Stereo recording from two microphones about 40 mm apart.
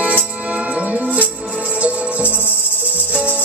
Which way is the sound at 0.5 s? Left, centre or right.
Right.